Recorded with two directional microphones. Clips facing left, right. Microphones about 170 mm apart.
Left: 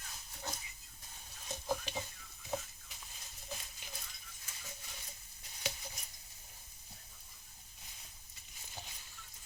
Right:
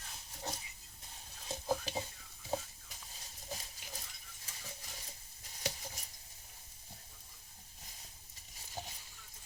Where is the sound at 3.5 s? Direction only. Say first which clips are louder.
Right 1 dB; 35° right (ahead or behind).